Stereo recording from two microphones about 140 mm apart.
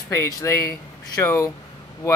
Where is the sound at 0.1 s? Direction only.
20° left (ahead or behind).